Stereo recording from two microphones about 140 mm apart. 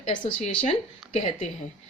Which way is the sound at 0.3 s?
50° left (ahead or behind).